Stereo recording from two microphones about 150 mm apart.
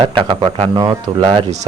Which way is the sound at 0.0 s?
35° right (ahead or behind).